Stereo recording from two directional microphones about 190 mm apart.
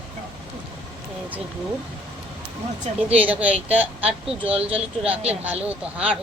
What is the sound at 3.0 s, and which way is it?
Speech, 10° right (ahead or behind).